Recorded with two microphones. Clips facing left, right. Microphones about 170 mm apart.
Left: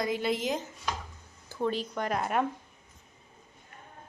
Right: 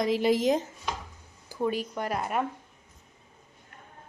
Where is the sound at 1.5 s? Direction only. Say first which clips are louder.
Right 2 dB; 10° right (ahead or behind).